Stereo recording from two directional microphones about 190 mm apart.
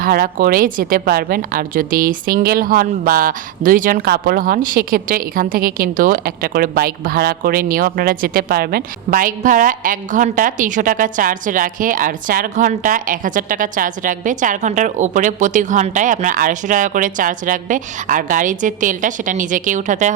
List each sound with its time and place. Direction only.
0.0 s a woman's voice: 50° right (ahead or behind)